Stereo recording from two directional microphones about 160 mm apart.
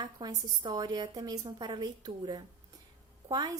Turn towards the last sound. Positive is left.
turn(degrees=-25)  # may be behind; listen again after turning